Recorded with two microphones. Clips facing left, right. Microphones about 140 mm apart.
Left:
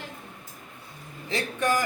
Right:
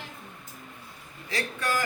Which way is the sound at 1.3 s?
20° left (ahead or behind).